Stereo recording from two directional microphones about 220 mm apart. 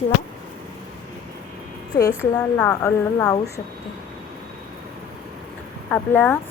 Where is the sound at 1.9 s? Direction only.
15° left (ahead or behind).